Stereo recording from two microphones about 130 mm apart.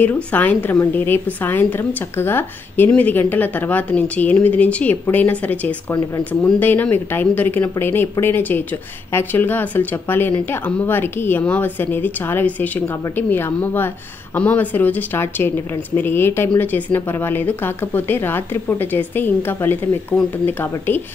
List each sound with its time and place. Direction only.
0.0 s speech: 15° left (ahead or behind)